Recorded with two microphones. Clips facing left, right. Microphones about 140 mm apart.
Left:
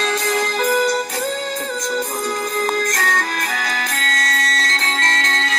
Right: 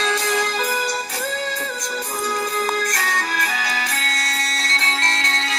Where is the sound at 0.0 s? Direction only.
45° left (ahead or behind).